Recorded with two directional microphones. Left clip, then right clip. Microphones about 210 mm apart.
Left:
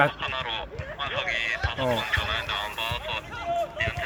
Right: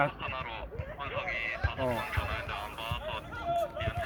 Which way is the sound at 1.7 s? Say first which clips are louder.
Left 7 dB; 55° left (ahead or behind).